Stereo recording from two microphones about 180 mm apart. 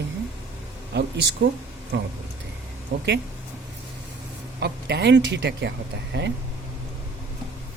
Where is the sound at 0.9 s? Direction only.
70° right (ahead or behind).